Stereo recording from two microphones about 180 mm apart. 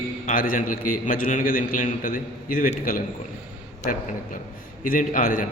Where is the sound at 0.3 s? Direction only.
50° left (ahead or behind).